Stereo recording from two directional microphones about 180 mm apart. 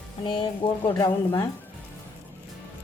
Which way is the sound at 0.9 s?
15° left (ahead or behind).